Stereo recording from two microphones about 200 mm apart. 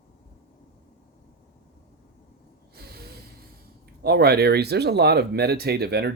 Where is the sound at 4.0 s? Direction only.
55° right (ahead or behind).